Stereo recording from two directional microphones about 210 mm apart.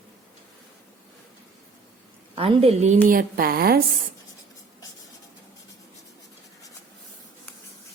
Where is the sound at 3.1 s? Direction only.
45° right (ahead or behind).